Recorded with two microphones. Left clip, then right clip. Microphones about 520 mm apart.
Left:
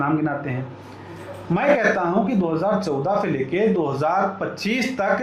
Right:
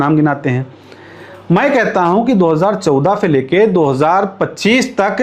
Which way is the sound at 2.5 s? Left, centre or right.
Right.